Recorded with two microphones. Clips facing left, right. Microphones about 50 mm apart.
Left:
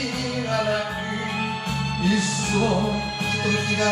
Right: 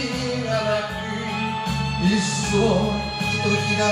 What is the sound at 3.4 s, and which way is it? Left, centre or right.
Music, centre.